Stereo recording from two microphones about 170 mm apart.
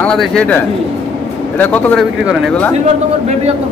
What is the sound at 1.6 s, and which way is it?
A man's voice, 10° left (ahead or behind).